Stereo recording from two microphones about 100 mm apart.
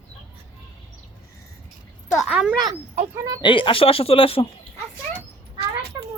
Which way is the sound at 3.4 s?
55° left (ahead or behind).